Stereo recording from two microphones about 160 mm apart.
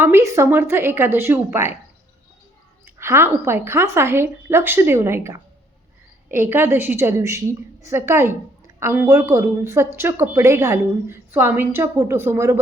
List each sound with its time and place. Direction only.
0.0 s a woman's voice: 15° right (ahead or behind)
2.8 s a woman's voice: 15° right (ahead or behind)